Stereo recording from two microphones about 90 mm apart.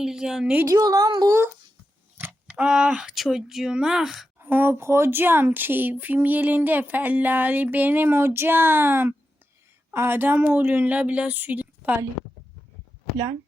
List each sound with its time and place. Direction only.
0.0 s speech: 5° right (ahead or behind)
0.6 s speech: 40° right (ahead or behind)
2.5 s speech: 5° right (ahead or behind)
4.4 s speech: 25° right (ahead or behind)